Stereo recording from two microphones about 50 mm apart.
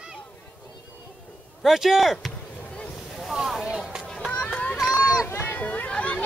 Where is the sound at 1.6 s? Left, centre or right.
Centre.